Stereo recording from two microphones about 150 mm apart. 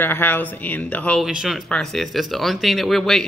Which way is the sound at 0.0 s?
15° left (ahead or behind).